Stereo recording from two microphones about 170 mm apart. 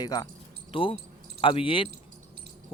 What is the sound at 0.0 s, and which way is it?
Speech, 25° left (ahead or behind).